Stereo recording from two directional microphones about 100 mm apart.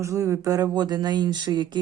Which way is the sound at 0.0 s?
30° right (ahead or behind).